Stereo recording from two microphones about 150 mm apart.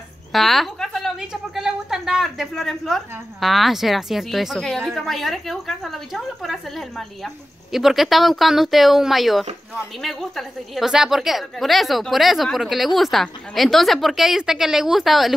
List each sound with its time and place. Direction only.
0.3 s a woman's voice: centre (ahead or behind)